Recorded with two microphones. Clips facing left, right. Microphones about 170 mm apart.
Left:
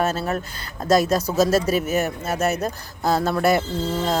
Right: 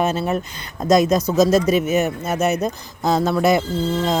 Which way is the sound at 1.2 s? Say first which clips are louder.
Right 3 dB; 10° left (ahead or behind).